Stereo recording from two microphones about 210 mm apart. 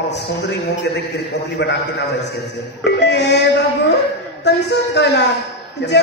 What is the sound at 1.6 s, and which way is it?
A man's voice, 55° left (ahead or behind).